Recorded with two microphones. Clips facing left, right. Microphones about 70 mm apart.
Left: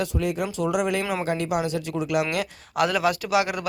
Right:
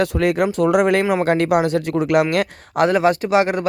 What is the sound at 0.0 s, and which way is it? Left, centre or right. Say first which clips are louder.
Speech: right 8 dB; right.